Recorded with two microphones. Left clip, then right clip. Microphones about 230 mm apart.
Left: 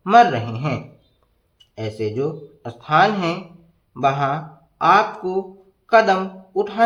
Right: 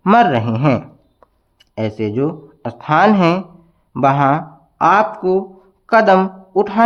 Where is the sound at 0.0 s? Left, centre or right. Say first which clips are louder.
Right 1 dB; right.